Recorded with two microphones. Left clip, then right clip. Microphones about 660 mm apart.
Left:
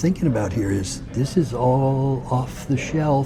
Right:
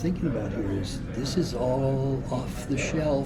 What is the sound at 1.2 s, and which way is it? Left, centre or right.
Speech, left.